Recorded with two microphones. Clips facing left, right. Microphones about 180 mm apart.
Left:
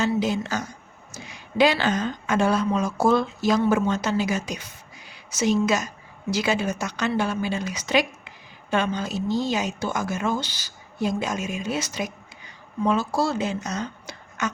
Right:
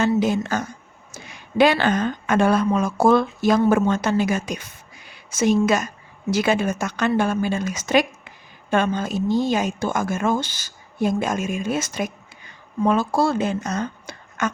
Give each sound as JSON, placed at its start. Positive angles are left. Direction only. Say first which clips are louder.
{"t": 0.0, "sound": "a woman's voice", "louder": "right 4 dB", "side_deg": -50}